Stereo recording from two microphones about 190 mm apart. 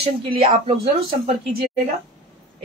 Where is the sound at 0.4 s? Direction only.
25° right (ahead or behind).